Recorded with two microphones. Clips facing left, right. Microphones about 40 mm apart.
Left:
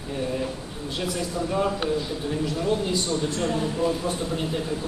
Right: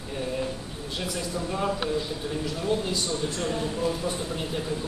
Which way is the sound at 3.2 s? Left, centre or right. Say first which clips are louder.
Left 3 dB; centre.